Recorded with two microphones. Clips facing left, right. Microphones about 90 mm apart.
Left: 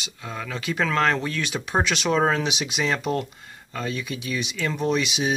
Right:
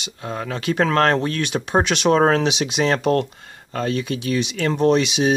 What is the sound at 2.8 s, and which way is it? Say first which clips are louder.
Speech: right 6 dB; 65° right (ahead or behind).